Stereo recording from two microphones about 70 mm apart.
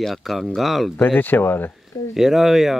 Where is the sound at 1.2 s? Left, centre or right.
Left.